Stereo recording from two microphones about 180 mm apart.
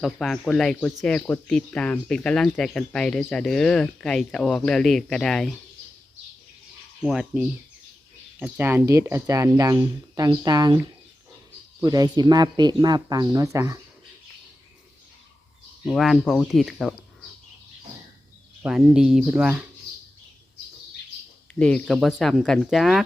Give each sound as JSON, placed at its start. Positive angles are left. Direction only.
{"t": 0.0, "sound": "speech", "side_deg": 0}
{"t": 7.0, "sound": "speech", "side_deg": -5}
{"t": 11.8, "sound": "speech", "side_deg": -20}
{"t": 15.8, "sound": "speech", "side_deg": 0}
{"t": 18.6, "sound": "speech", "side_deg": -5}
{"t": 21.6, "sound": "speech", "side_deg": 5}